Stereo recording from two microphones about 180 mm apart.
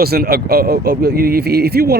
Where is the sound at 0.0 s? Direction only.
60° right (ahead or behind).